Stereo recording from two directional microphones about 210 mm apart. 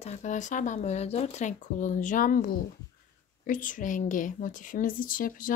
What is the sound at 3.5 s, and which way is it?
A woman's voice, 40° left (ahead or behind).